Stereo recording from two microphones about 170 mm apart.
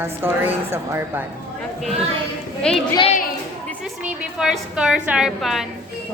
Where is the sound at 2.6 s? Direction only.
5° left (ahead or behind).